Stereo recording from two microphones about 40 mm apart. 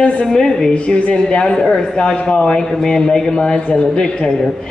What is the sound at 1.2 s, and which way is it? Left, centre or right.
A man's voice, centre.